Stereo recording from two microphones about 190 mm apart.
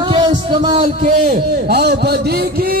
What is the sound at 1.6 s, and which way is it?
Speech, 60° right (ahead or behind).